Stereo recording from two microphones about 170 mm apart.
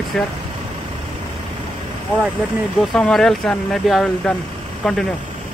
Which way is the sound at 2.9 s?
5° left (ahead or behind).